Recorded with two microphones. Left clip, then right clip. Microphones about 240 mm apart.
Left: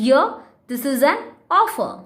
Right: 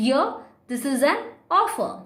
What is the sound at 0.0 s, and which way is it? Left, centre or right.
A woman's voice, centre.